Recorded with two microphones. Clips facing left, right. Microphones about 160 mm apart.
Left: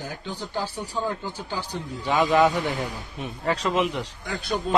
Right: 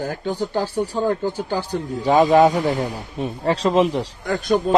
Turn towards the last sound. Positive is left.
turn(degrees=-50)  # may be behind; listen again after turning